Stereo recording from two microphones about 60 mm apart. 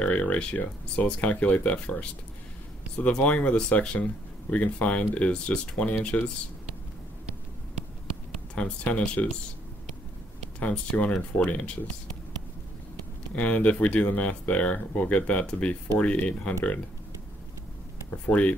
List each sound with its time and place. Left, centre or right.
0.0 s a sound: left
1.0 s speech: left
8.5 s speech: left
10.6 s speech: left
13.3 s speech: left
18.1 s speech: centre